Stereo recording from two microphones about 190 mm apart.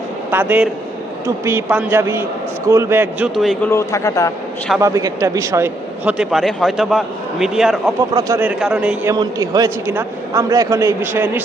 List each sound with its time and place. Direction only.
0.3 s a man's voice: 10° right (ahead or behind)
3.3 s a man's voice: centre (ahead or behind)
3.7 s a man's voice: 15° left (ahead or behind)
4.8 s a man's voice: 15° right (ahead or behind)
8.1 s a man's voice: 15° right (ahead or behind)
9.1 s a man's voice: 20° right (ahead or behind)